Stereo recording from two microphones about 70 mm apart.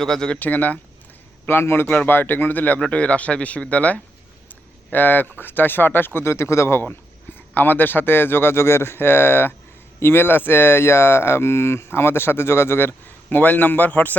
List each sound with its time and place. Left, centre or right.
0.0 s speech: centre
0.3 s a man's voice: left
6.1 s speech: left
6.8 s speech: left
13.3 s a man's voice: left